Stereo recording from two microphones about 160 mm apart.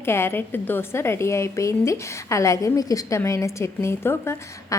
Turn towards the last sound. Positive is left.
turn(degrees=15)  # may be behind; listen again after turning